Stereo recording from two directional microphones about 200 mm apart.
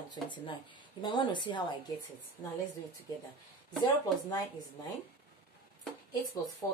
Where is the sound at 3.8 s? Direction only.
15° left (ahead or behind).